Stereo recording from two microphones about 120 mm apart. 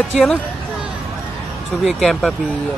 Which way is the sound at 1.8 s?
Centre (ahead or behind).